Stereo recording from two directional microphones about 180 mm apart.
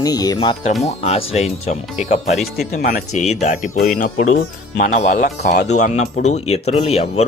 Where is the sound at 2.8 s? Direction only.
55° left (ahead or behind).